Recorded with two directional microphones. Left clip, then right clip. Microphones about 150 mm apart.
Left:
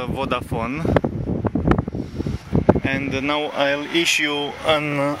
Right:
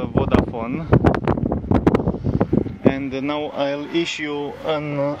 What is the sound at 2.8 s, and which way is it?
Speech, 20° right (ahead or behind).